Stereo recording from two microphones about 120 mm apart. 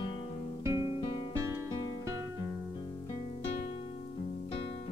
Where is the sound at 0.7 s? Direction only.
50° left (ahead or behind).